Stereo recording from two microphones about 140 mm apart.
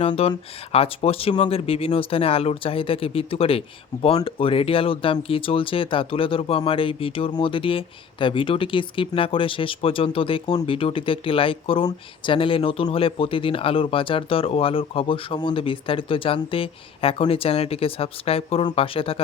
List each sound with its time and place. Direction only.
0.0 s speech: 40° left (ahead or behind)